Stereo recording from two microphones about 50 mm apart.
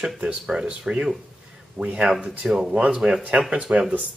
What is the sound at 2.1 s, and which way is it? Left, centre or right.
Speech, centre.